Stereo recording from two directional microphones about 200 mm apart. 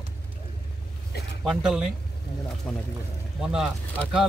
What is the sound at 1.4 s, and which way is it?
Speech, centre (ahead or behind).